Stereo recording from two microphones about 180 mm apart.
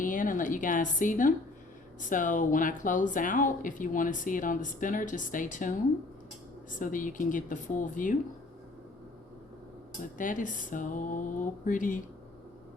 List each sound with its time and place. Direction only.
0.0 s a sound: 50° left (ahead or behind)
2.0 s speech: 45° left (ahead or behind)
10.2 s speech: 45° left (ahead or behind)